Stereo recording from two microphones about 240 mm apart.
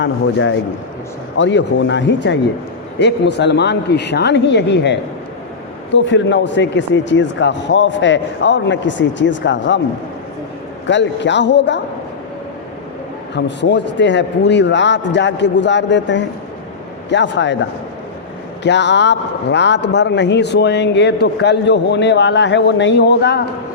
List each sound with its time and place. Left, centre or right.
0.0 s a man's voice: left
10.8 s a man's voice: left
13.3 s a man's voice: left